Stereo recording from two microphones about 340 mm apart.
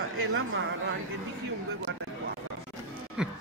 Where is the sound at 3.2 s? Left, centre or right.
Centre.